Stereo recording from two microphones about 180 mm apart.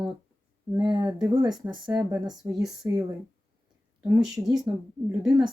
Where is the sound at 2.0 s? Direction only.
15° right (ahead or behind).